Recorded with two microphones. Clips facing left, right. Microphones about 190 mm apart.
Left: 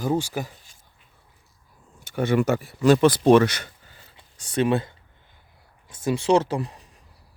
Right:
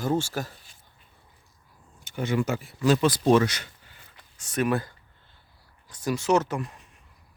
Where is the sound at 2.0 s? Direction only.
60° left (ahead or behind).